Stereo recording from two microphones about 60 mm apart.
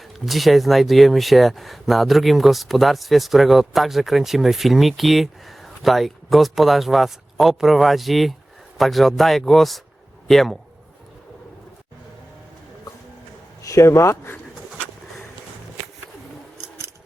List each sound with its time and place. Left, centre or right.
0.3 s speech: centre
13.6 s a man's voice: left